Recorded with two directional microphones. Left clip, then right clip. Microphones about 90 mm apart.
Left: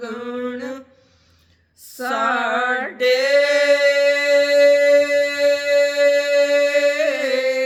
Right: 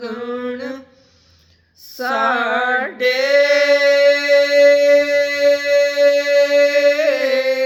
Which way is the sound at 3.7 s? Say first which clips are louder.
Right 2 dB; 45° left (ahead or behind).